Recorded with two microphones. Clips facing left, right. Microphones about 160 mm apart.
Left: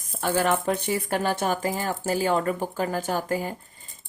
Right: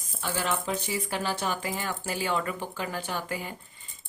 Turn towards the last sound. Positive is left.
turn(degrees=40)  # may be behind; listen again after turning